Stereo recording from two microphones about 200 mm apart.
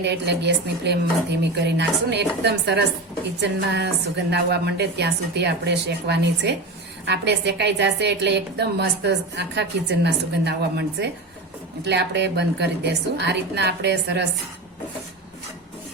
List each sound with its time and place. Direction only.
0.0 s a woman's voice: 60° right (ahead or behind)